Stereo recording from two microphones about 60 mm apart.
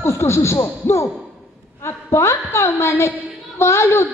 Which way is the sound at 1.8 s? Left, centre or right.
Left.